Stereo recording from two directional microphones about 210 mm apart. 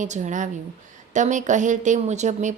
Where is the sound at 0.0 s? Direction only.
35° right (ahead or behind).